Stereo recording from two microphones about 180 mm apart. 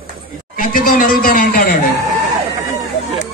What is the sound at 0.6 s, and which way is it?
Music, 50° left (ahead or behind).